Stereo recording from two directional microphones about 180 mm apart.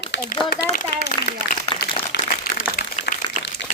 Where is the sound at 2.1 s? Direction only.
70° left (ahead or behind).